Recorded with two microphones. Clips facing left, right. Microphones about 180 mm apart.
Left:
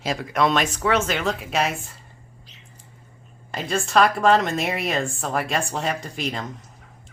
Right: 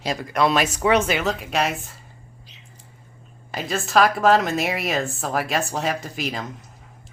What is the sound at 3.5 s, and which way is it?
A woman's voice, centre (ahead or behind).